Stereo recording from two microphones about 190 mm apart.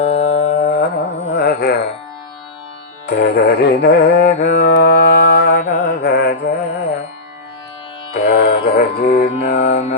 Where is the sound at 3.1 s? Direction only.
60° left (ahead or behind).